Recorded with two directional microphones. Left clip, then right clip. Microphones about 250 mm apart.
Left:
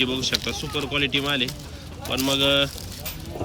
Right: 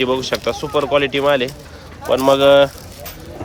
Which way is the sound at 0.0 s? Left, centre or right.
Centre.